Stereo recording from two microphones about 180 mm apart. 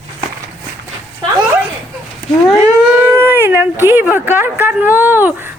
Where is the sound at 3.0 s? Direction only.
15° right (ahead or behind).